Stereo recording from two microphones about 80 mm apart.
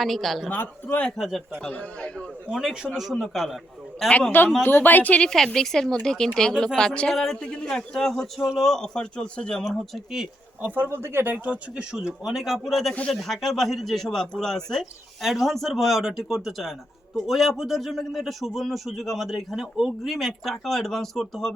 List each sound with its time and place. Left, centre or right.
0.0 s a man's voice: centre
0.4 s speech: left
0.9 s speech: centre
1.2 s a man's voice: centre
1.7 s speech: centre
2.5 s a man's voice: centre
4.6 s speech: left
5.5 s speech: centre
10.6 s speech: right; by 12.9 s centre
12.9 s speech: centre
13.1 s a man's voice: centre